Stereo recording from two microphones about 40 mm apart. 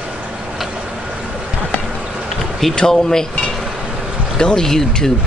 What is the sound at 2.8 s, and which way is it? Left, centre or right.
Speech, centre.